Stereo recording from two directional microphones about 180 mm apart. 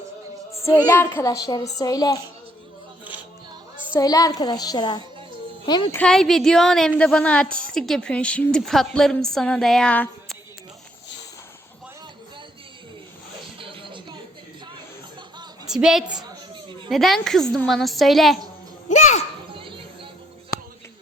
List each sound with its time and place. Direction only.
0.5 s music: 15° left (ahead or behind)
0.9 s a woman's voice: 15° left (ahead or behind)
4.0 s a child's voice: 20° left (ahead or behind)
6.0 s a woman's voice: 5° left (ahead or behind)
13.6 s music: 30° right (ahead or behind)
15.6 s a woman's voice: 5° right (ahead or behind)
16.6 s a sound: 25° right (ahead or behind)
16.9 s a woman's voice: centre (ahead or behind)
18.9 s music: 40° left (ahead or behind)
19.5 s music: 30° right (ahead or behind)